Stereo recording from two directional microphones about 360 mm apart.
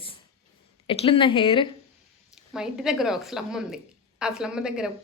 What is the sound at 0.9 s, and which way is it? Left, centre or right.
Speech, centre.